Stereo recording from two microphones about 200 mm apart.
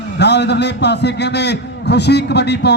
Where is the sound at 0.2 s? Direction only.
60° left (ahead or behind).